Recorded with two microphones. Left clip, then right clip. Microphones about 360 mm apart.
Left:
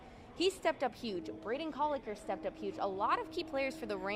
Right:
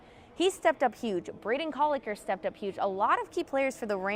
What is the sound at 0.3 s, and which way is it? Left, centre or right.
Speech, right.